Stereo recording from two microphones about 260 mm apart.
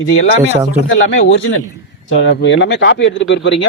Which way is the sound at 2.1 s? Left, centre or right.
Left.